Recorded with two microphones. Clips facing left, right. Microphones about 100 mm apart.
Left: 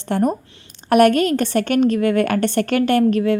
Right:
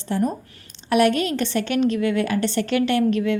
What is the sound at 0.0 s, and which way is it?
A woman's voice, 60° left (ahead or behind).